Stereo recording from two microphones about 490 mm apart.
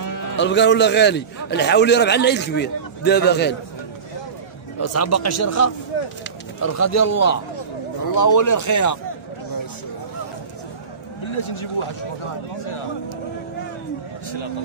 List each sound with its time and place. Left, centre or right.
0.4 s a man's voice: left
4.7 s speech: left
11.3 s speech: left